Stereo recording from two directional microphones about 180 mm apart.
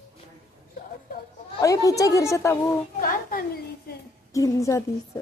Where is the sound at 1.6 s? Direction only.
20° left (ahead or behind).